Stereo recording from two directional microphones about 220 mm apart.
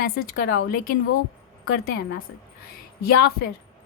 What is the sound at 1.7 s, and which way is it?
Speech, 45° left (ahead or behind).